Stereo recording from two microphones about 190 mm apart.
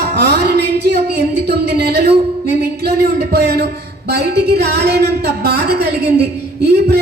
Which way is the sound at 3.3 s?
60° right (ahead or behind).